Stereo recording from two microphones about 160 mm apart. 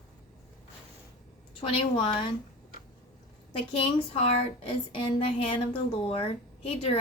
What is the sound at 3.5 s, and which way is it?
A woman's voice, 35° left (ahead or behind).